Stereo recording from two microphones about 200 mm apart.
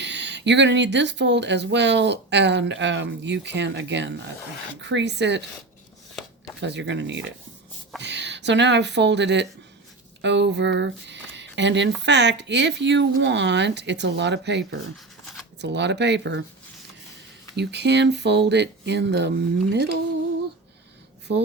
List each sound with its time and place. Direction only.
0.0 s speech: 60° right (ahead or behind)
6.6 s speech: 60° right (ahead or behind)
17.6 s speech: 60° right (ahead or behind)